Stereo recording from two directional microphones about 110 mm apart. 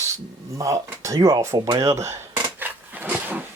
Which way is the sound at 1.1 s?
30° right (ahead or behind).